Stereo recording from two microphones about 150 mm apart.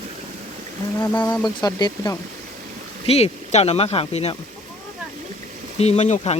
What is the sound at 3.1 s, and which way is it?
Speech, 45° left (ahead or behind).